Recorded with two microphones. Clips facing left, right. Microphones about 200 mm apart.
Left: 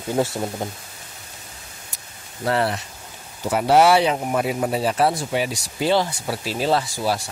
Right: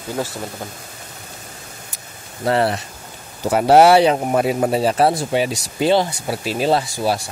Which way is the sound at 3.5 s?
45° right (ahead or behind).